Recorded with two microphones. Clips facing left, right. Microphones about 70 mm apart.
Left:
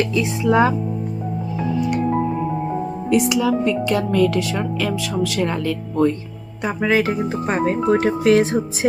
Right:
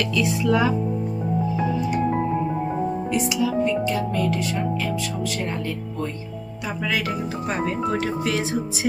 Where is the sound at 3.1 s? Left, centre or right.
Left.